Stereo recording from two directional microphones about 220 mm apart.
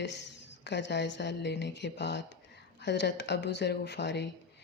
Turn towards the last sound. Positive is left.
turn(degrees=50)  # may be behind; listen again after turning